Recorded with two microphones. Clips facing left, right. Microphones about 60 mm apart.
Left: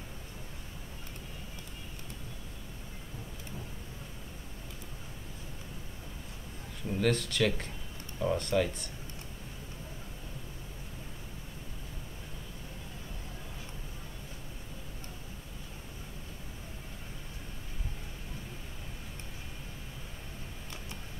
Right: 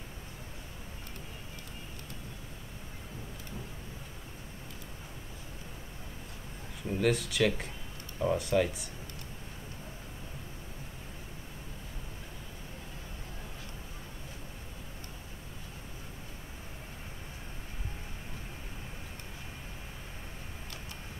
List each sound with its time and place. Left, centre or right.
6.9 s speech: centre